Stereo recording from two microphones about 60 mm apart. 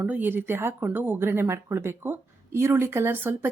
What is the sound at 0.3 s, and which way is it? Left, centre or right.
Speech, right.